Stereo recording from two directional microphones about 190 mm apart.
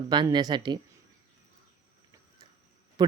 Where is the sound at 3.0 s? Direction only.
20° right (ahead or behind).